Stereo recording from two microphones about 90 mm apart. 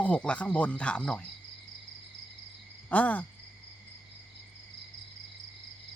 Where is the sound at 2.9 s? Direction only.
15° left (ahead or behind).